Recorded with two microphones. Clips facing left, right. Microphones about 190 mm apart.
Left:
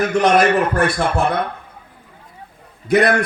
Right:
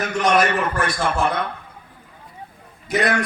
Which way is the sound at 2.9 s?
60° left (ahead or behind).